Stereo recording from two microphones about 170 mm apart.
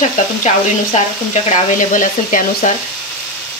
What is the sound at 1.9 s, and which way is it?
Sizzle, 50° left (ahead or behind).